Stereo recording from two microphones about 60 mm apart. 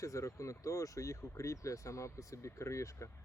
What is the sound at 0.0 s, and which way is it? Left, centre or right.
Speech, left.